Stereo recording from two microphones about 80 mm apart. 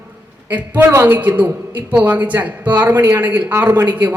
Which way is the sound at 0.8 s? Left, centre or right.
Right.